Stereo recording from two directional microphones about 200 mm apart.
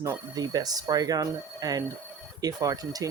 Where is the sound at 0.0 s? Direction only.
20° right (ahead or behind).